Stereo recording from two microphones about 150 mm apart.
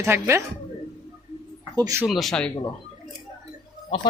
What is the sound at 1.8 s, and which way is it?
Speech, 20° right (ahead or behind).